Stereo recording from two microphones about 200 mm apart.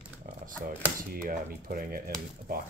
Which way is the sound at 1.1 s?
45° right (ahead or behind).